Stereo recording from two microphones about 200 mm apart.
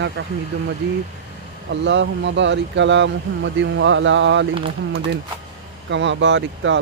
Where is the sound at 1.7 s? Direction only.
65° right (ahead or behind).